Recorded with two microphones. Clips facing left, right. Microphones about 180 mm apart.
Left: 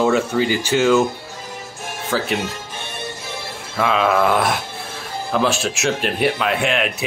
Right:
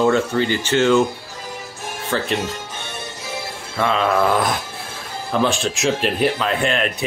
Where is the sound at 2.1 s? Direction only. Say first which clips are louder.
Left 1 dB; 5° left (ahead or behind).